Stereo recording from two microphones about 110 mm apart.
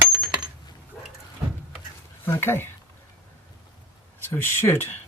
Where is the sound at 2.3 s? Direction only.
20° left (ahead or behind).